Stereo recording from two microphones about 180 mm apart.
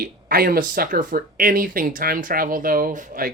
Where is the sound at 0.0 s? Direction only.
55° right (ahead or behind).